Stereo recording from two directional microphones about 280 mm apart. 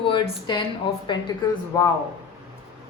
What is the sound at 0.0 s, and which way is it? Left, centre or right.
A woman's voice, centre.